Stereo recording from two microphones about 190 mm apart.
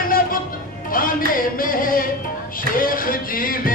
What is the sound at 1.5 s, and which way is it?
Singing, 45° left (ahead or behind).